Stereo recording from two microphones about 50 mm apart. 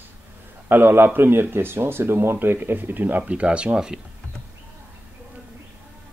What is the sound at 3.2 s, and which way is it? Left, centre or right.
Speech, right.